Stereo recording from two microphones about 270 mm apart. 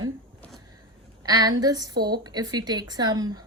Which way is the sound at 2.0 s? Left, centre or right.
Right.